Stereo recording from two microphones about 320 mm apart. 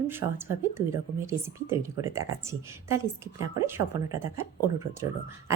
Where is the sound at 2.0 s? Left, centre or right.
Right.